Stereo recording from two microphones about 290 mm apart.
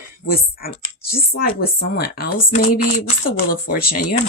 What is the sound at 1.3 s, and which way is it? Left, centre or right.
Speech, left.